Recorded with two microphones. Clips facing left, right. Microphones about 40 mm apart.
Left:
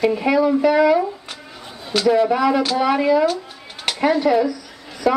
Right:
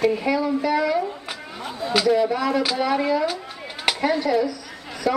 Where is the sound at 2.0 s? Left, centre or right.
Centre.